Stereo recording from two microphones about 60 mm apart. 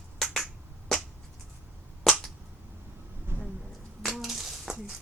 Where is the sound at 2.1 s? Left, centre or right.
Centre.